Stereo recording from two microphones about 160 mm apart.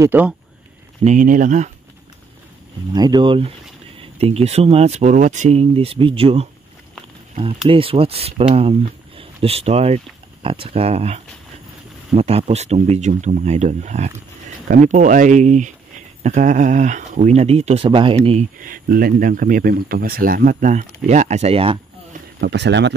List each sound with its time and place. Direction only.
0.0 s speech: 10° right (ahead or behind)
1.0 s speech: 55° right (ahead or behind)
2.9 s speech: 25° right (ahead or behind)
7.6 s speech: 35° right (ahead or behind)
12.2 s speech: 40° right (ahead or behind)
18.6 s speech: 60° right (ahead or behind); by 21.7 s 35° right (ahead or behind)
22.4 s speech: 90° right